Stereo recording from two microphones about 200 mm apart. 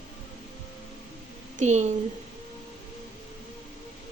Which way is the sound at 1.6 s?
35° right (ahead or behind).